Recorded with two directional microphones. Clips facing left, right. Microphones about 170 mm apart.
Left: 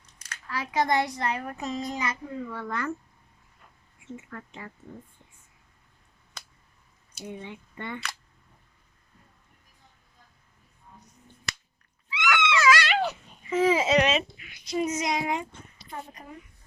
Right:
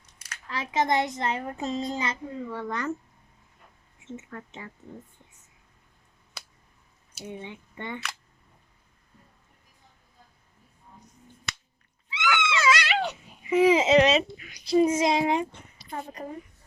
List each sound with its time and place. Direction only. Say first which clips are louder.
0.4 s a child's voice: even; 20° right (ahead or behind)
4.0 s a child's voice: right 1 dB; 25° right (ahead or behind)
7.4 s speech: even; 20° right (ahead or behind)
12.0 s a sound: left 1 dB; 30° right (ahead or behind)
13.4 s a child's voice: right 3 dB; 15° right (ahead or behind)
14.1 s a child's voice: right 3 dB; 35° right (ahead or behind)
16.2 s a woman's voice: right 8 dB; 90° right